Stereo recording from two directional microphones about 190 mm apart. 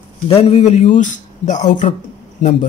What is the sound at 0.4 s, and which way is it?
Speech, 30° left (ahead or behind).